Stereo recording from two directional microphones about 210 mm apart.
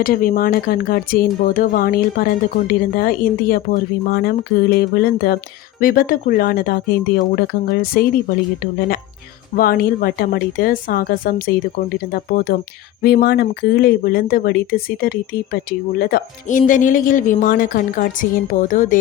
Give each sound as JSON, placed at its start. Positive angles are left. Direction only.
{"t": 0.0, "sound": "speech", "side_deg": 45}
{"t": 9.6, "sound": "speech", "side_deg": 45}